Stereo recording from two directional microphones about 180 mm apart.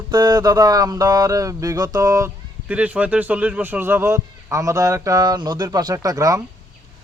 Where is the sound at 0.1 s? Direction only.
25° right (ahead or behind).